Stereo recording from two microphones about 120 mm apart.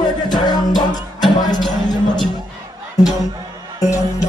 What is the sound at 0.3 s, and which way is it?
Music, 35° left (ahead or behind).